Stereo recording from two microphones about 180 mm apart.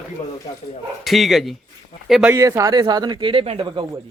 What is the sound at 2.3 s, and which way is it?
Speech, 20° right (ahead or behind).